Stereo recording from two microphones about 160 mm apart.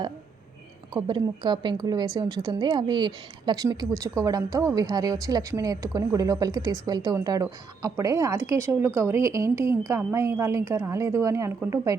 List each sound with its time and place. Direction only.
0.9 s a woman's voice: 30° right (ahead or behind)